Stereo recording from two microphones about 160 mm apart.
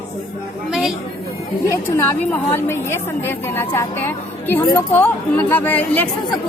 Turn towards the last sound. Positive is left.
turn(degrees=10)  # may be behind; listen again after turning